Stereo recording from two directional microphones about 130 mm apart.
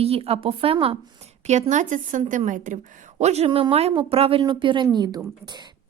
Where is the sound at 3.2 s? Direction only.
55° right (ahead or behind).